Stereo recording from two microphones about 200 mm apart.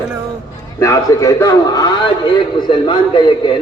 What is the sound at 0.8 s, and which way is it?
A man's voice, 15° left (ahead or behind).